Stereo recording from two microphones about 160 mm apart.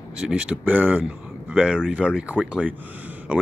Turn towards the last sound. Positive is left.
turn(degrees=-10)  # may be behind; listen again after turning